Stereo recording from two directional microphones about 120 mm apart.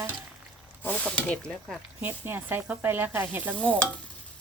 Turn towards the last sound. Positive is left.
turn(degrees=10)  # may be behind; listen again after turning